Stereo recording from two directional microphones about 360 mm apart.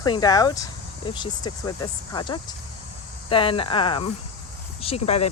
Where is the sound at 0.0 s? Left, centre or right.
Centre.